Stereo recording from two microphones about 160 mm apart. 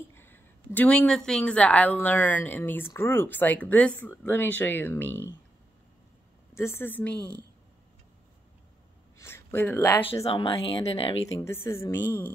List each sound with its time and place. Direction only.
0.1 s speech: 15° left (ahead or behind)
6.5 s speech: 15° left (ahead or behind)
9.2 s speech: 15° left (ahead or behind)
10.2 s speech: 35° left (ahead or behind)
11.3 s speech: 15° left (ahead or behind)